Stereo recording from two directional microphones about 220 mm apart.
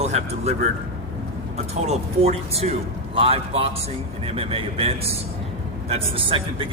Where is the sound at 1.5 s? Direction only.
30° right (ahead or behind).